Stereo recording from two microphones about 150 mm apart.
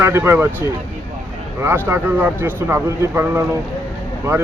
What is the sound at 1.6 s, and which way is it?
Speech, 15° right (ahead or behind).